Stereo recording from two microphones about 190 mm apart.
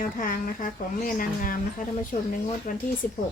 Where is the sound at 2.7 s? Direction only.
45° left (ahead or behind).